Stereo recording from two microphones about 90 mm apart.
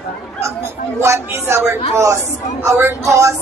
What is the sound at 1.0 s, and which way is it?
A woman's voice, 30° right (ahead or behind).